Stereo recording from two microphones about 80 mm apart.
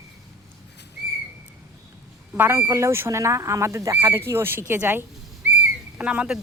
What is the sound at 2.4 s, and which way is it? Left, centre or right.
Speech, right.